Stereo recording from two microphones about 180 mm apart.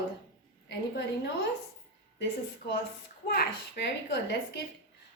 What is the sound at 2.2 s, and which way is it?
A child's voice, 60° left (ahead or behind).